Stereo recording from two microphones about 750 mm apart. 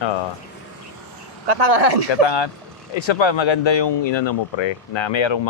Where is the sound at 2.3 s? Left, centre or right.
Left.